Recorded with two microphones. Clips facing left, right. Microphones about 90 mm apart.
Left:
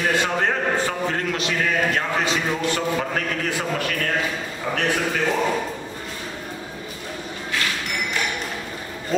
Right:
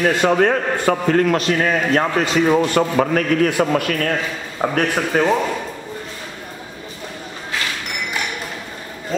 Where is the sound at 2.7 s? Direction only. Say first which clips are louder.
Right 7 dB; 65° right (ahead or behind); by 5.3 s 45° right (ahead or behind).